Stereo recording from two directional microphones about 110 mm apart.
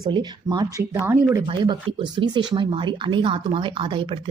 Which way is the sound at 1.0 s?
25° right (ahead or behind).